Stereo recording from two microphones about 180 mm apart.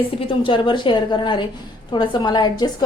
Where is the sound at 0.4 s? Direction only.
25° left (ahead or behind).